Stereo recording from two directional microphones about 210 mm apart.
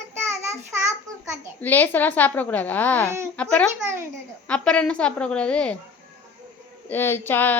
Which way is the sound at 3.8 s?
10° right (ahead or behind).